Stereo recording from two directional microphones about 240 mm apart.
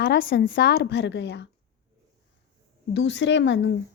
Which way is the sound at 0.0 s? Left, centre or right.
Left.